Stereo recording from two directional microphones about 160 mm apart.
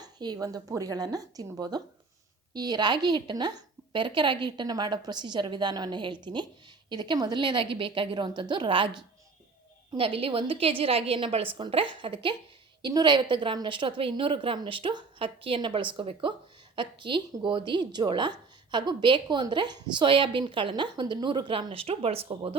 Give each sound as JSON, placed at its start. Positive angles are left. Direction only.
{"t": 0.0, "sound": "a woman's voice", "side_deg": -25}